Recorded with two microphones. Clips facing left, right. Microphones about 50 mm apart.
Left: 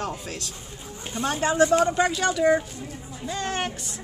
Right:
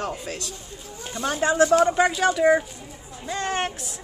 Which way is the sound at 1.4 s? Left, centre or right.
Centre.